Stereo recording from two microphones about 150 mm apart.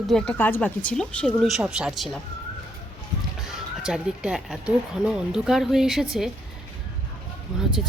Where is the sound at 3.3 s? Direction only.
5° right (ahead or behind).